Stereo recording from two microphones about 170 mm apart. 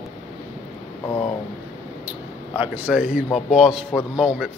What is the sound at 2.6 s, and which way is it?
A man's voice, 5° right (ahead or behind).